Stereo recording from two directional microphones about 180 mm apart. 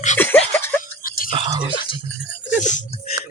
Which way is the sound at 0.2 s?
10° left (ahead or behind).